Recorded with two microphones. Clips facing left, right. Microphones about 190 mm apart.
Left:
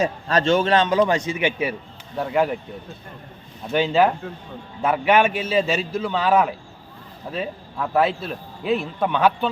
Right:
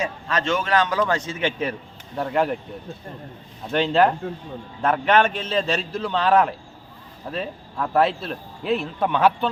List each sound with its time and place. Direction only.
0.0 s a man's voice: 35° left (ahead or behind); by 2.6 s centre (ahead or behind)
3.7 s speech: 5° left (ahead or behind)